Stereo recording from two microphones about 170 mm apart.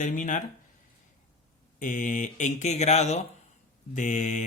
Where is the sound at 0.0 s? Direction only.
50° left (ahead or behind).